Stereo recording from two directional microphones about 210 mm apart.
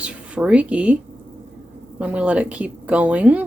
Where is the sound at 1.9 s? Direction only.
5° right (ahead or behind).